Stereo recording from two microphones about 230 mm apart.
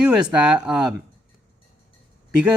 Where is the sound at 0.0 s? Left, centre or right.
Centre.